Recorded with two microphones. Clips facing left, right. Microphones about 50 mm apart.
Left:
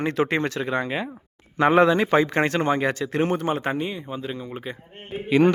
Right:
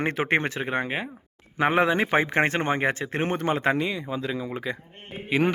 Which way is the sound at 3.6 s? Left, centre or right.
Right.